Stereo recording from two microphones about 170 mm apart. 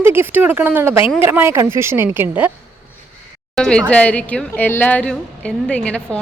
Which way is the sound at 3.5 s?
5° left (ahead or behind).